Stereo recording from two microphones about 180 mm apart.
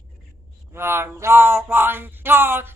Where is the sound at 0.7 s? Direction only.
15° right (ahead or behind).